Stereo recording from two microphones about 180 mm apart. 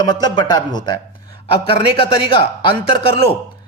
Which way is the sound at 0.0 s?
25° left (ahead or behind).